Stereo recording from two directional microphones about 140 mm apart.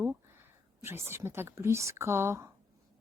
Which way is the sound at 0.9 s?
15° right (ahead or behind).